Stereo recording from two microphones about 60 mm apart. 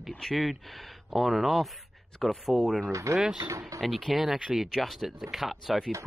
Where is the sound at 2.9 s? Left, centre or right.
Right.